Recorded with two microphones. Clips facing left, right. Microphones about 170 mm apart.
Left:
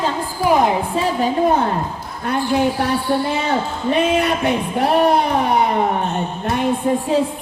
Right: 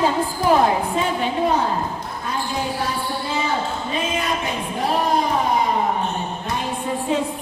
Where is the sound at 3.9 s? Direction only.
65° left (ahead or behind).